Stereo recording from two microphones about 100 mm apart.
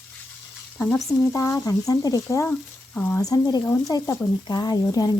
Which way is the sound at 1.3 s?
35° left (ahead or behind).